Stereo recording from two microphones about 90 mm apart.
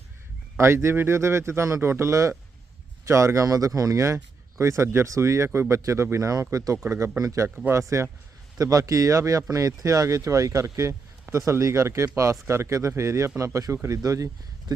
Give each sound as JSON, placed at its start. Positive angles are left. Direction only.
{"t": 0.5, "sound": "a man's voice", "side_deg": -30}